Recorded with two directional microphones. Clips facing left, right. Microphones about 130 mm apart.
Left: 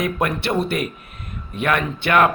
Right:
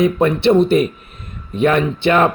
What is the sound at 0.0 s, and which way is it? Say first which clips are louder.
A man's voice: right 8 dB; 25° right (ahead or behind).